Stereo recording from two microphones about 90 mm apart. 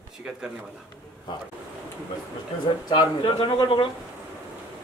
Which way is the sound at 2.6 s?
55° left (ahead or behind).